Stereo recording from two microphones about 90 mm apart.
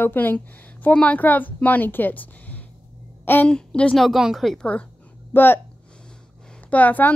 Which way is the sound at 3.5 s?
10° left (ahead or behind).